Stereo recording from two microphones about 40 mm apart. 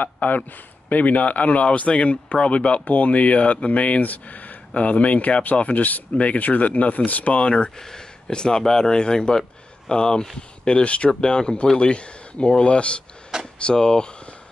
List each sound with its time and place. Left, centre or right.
0.0 s speech: left
7.3 s speech: left